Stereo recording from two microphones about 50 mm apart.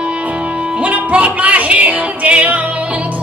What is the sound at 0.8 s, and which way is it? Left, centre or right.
Music, right.